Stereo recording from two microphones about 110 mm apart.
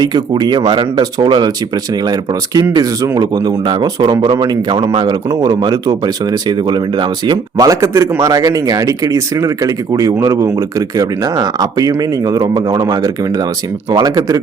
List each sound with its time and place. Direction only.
0.0 s a man's voice: 40° right (ahead or behind)
2.7 s a man's voice: 35° right (ahead or behind)
7.3 s a man's voice: 35° right (ahead or behind)